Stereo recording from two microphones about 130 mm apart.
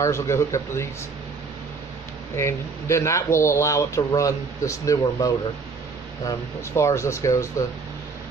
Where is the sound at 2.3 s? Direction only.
20° left (ahead or behind).